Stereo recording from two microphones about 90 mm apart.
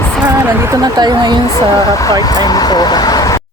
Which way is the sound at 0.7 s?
50° right (ahead or behind).